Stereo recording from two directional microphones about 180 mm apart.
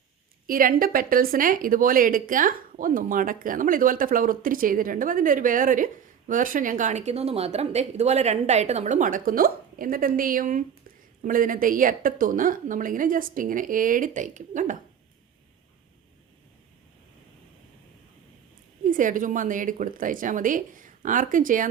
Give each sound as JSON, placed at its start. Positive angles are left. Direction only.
{"t": 0.4, "sound": "a woman's voice", "side_deg": -50}
{"t": 18.9, "sound": "a woman's voice", "side_deg": -45}